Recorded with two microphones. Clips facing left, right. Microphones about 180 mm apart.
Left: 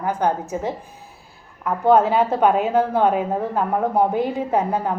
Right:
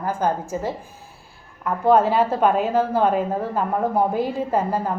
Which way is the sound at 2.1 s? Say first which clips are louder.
Left 1 dB; 5° right (ahead or behind).